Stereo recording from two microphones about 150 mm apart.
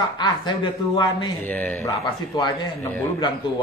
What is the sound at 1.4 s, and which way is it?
Speech, 10° left (ahead or behind).